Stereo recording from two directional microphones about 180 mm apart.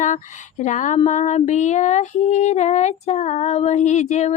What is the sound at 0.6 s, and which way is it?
Female singing, 40° left (ahead or behind).